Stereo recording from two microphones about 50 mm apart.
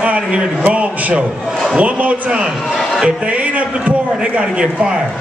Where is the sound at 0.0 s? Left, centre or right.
Right.